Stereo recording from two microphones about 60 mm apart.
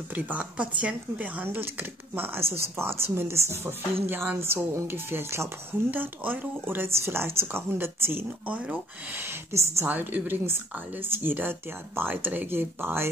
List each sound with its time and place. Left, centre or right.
0.1 s speech: right
4.0 s speech: right
5.9 s speech: right
8.5 s speech: right
9.5 s a woman's voice: right
9.8 s speech: right